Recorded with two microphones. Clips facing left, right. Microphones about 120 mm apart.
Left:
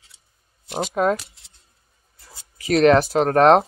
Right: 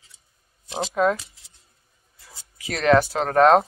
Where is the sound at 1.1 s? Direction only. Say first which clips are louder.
Left 5 dB; 90° left.